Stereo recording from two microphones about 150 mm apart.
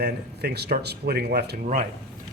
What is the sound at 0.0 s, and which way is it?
Speech, 90° right.